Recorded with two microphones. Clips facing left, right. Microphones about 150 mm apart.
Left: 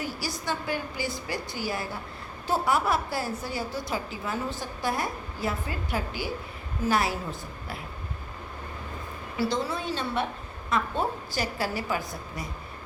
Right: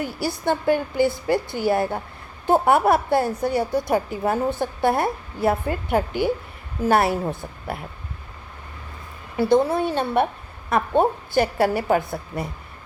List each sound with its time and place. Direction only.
0.0 s a woman's voice: 55° right (ahead or behind)
9.4 s a woman's voice: 55° right (ahead or behind)